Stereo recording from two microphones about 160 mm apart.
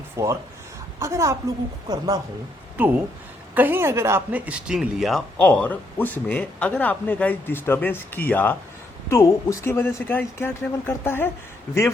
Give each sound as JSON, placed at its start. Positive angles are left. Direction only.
{"t": 0.2, "sound": "a woman's voice", "side_deg": -20}
{"t": 2.7, "sound": "a woman's voice", "side_deg": -10}